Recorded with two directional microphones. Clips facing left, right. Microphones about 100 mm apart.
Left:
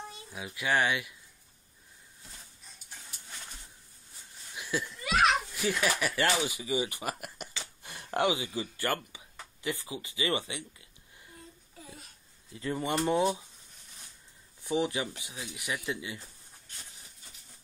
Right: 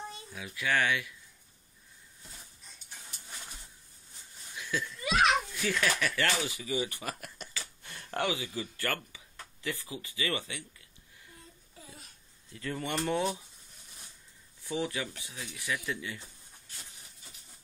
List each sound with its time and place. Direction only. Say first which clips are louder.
0.3 s speech: left 2 dB; 15° left (ahead or behind)
4.6 s a sound: left 1 dB; 15° left (ahead or behind)
5.0 s children playing: left 1 dB; centre (ahead or behind)
5.7 s speech: left 1 dB; 15° left (ahead or behind)
12.5 s speech: left 3 dB; 20° left (ahead or behind)
14.6 s speech: left 4 dB; 20° left (ahead or behind)